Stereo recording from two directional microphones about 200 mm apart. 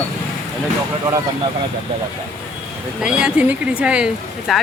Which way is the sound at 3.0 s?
5° right (ahead or behind).